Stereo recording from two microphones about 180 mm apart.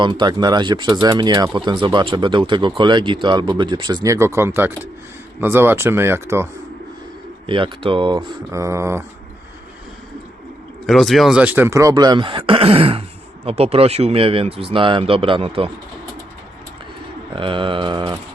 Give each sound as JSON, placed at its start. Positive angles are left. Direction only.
{"t": 0.0, "sound": "speech", "side_deg": -25}
{"t": 7.4, "sound": "speech", "side_deg": -30}
{"t": 10.8, "sound": "speech", "side_deg": 0}
{"t": 17.3, "sound": "speech", "side_deg": -30}